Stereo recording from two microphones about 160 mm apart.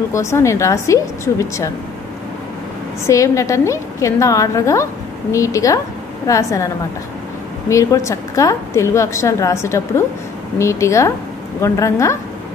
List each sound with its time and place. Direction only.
0.1 s a woman's voice: 15° left (ahead or behind)
3.1 s a woman's voice: 20° left (ahead or behind)
7.7 s a woman's voice: 20° left (ahead or behind)